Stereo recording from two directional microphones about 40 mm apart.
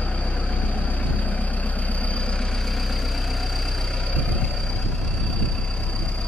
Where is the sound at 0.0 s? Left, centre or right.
Left; by 4.1 s centre.